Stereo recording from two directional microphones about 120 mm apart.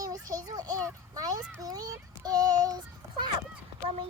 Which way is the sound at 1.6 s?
30° right (ahead or behind).